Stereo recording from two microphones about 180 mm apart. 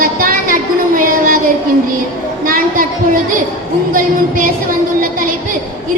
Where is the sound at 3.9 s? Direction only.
50° right (ahead or behind).